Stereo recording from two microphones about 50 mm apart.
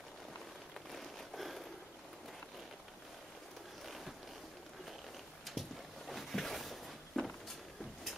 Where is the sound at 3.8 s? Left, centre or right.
Centre.